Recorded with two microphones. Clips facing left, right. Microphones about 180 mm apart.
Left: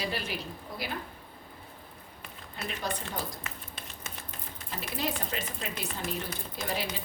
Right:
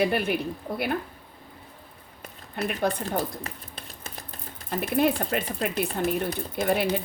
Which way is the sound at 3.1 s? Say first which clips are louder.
Right 8 dB; 35° right (ahead or behind).